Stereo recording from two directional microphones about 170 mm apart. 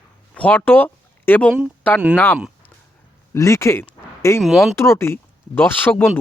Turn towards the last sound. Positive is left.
turn(degrees=10)  # may be behind; listen again after turning